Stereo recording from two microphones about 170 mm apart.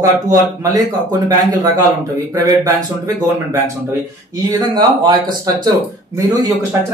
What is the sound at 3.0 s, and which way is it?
Speech, 20° right (ahead or behind).